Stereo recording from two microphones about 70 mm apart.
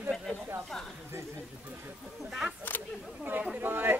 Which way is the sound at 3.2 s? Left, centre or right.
Right.